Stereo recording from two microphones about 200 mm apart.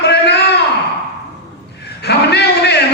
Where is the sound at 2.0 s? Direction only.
55° left (ahead or behind).